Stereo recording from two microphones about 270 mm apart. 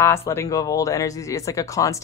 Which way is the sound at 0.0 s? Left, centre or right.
Centre.